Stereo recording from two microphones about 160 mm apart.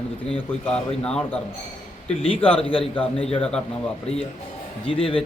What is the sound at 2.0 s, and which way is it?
Speech, 35° left (ahead or behind).